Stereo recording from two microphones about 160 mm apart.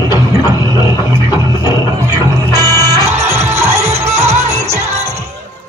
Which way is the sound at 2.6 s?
20° right (ahead or behind).